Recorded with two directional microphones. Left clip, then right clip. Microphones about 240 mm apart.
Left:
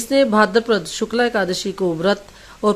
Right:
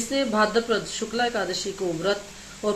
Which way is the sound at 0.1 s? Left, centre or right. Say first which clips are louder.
Left 8 dB; left.